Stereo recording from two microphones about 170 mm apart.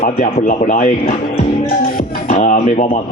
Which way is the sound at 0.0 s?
40° left (ahead or behind).